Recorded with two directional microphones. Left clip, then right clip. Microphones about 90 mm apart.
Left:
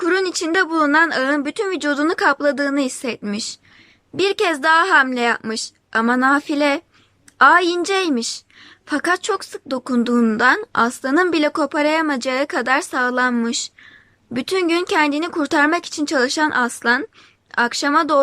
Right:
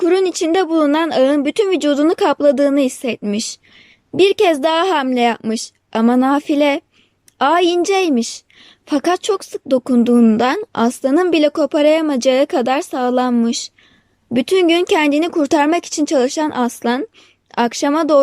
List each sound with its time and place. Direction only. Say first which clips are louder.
0.0 s speech: right 4 dB; 35° right (ahead or behind)